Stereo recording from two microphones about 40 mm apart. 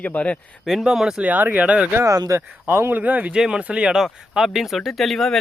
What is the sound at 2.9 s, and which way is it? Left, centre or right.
Speech, right.